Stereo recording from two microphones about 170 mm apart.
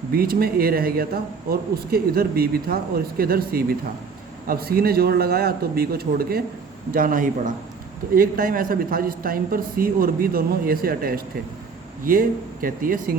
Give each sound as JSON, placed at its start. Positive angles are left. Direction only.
{"t": 0.1, "sound": "a man's voice", "side_deg": -60}